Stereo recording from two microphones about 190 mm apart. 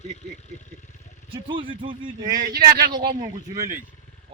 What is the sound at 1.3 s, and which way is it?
Speech, 25° right (ahead or behind).